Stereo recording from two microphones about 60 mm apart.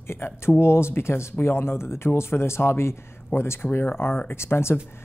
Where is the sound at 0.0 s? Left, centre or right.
Left.